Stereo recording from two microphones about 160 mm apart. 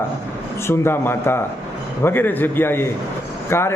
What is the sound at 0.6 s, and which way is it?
A man's voice, 15° left (ahead or behind).